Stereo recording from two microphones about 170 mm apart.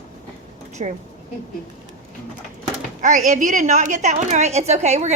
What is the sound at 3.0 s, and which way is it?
A woman's voice, 45° right (ahead or behind).